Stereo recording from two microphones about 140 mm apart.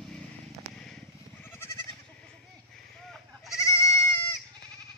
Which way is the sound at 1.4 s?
15° left (ahead or behind).